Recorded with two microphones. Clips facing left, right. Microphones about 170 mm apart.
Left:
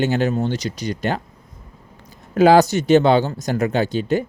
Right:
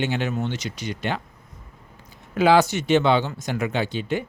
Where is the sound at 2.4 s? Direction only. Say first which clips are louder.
Left 5 dB; 40° left (ahead or behind).